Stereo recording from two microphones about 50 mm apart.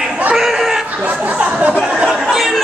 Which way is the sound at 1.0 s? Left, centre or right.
Right.